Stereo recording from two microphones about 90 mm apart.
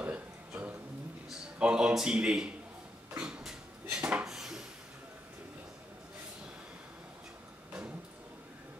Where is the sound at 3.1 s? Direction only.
10° right (ahead or behind).